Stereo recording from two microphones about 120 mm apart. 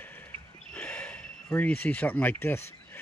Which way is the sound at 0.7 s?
10° left (ahead or behind).